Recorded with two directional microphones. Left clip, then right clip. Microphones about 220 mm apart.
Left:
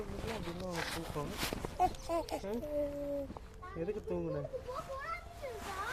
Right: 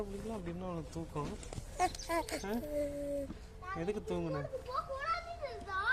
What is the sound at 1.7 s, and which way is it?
Speech, 20° right (ahead or behind).